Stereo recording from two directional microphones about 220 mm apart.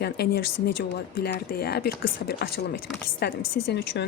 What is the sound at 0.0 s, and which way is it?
Speech, 45° left (ahead or behind).